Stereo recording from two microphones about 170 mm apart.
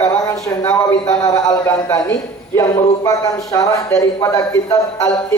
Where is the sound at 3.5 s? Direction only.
20° left (ahead or behind).